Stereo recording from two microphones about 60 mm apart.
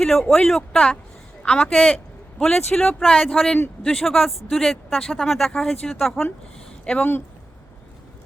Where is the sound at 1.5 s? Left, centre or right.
Centre.